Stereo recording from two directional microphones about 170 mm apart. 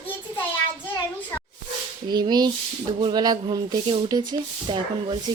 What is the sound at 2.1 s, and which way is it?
Speech, 25° right (ahead or behind).